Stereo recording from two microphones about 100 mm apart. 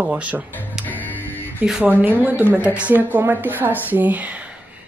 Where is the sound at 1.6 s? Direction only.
15° right (ahead or behind).